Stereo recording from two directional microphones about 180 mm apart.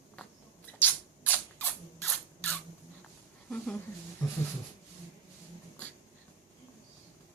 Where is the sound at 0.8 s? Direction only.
10° left (ahead or behind).